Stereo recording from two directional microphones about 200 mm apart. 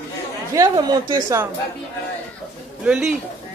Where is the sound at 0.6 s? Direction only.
20° right (ahead or behind).